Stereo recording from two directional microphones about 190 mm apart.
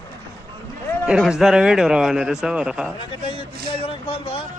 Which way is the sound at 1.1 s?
5° right (ahead or behind).